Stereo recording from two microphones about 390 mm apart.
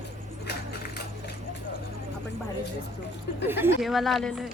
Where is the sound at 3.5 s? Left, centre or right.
Centre.